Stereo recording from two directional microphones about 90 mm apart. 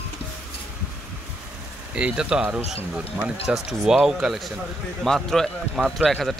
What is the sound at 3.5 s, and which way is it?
Speech, 5° right (ahead or behind).